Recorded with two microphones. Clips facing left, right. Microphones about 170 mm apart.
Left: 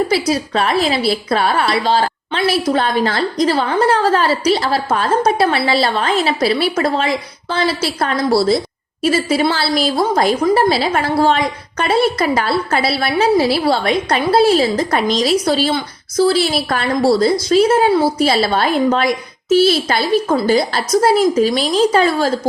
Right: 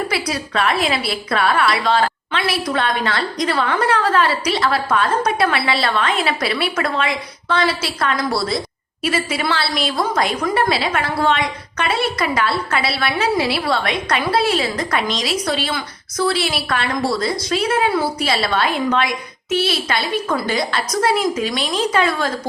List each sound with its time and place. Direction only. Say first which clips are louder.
0.1 s a woman's voice: left 6 dB; 30° left (ahead or behind)